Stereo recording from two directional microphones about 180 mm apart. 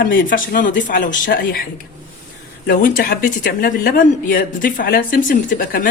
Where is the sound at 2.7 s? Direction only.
55° left (ahead or behind).